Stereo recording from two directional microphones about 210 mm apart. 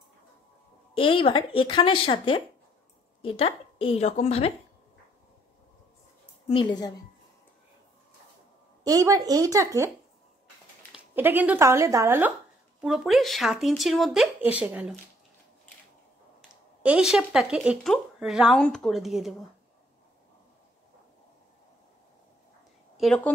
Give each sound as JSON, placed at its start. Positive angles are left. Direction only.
{"t": 0.9, "sound": "speech", "side_deg": 25}
{"t": 6.5, "sound": "speech", "side_deg": 20}
{"t": 8.8, "sound": "a woman's voice", "side_deg": -15}
{"t": 10.9, "sound": "speech", "side_deg": -10}
{"t": 12.8, "sound": "speech", "side_deg": 0}
{"t": 16.8, "sound": "speech", "side_deg": -5}
{"t": 22.9, "sound": "a woman's voice", "side_deg": 5}